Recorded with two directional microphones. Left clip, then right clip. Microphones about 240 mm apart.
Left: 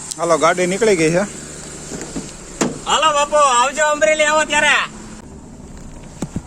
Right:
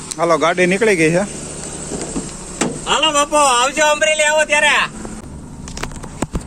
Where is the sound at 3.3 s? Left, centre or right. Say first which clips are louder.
Right 1 dB; right.